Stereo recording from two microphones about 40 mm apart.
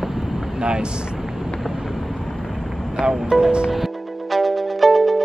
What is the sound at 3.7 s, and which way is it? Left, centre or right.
Music, centre.